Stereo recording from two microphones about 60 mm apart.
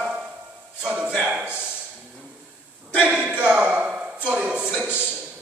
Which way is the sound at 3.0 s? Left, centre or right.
Centre.